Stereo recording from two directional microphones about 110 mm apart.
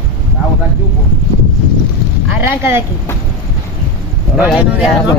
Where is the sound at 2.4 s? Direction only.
20° right (ahead or behind).